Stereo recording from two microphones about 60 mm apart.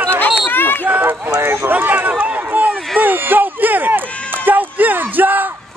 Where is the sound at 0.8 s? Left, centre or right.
Right.